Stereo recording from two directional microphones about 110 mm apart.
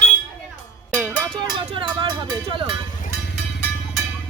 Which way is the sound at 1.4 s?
45° right (ahead or behind).